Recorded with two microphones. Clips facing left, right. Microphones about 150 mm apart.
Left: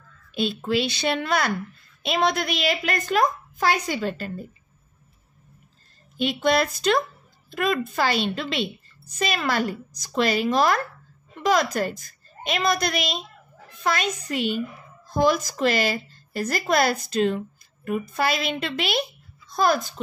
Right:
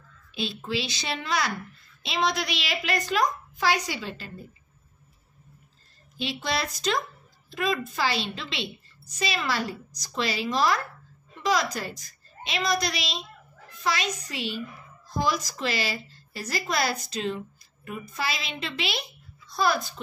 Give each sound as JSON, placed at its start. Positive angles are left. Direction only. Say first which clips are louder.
{"t": 0.3, "sound": "a woman's voice", "louder": "left 6 dB", "side_deg": 55}
{"t": 6.1, "sound": "a woman's voice", "louder": "left 8 dB", "side_deg": 50}